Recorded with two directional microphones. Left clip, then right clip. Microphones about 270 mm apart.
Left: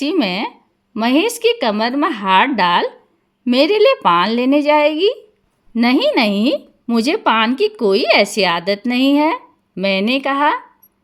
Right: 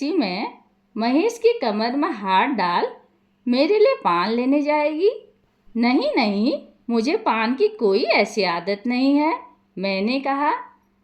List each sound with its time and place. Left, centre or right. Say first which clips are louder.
0.0 s speech: left 5 dB; left